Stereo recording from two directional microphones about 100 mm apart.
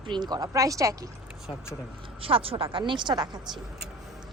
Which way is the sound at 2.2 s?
70° right (ahead or behind).